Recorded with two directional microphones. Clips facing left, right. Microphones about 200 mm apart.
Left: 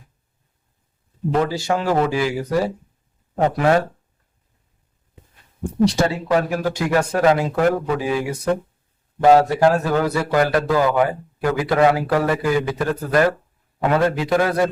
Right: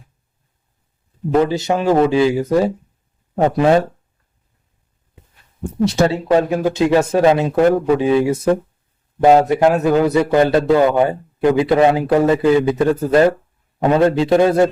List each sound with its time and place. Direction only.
1.5 s a man's voice: 20° right (ahead or behind)
5.8 s a man's voice: 25° right (ahead or behind)